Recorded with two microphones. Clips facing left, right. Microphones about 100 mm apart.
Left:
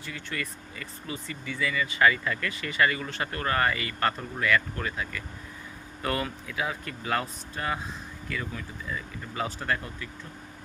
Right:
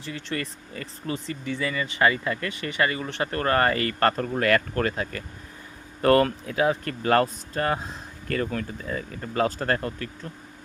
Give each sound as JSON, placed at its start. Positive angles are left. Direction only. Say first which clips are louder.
{"t": 0.0, "sound": "speech", "louder": "right 4 dB", "side_deg": -40}
{"t": 3.3, "sound": "speech", "louder": "right 5 dB", "side_deg": -40}